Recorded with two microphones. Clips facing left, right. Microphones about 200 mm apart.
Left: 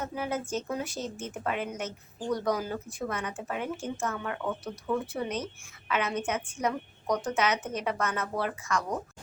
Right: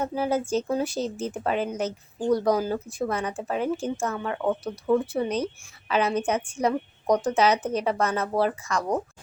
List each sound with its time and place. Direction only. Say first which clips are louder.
0.0 s speech: right 7 dB; 30° right (ahead or behind)